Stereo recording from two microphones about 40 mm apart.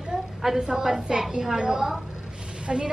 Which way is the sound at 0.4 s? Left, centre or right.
Centre.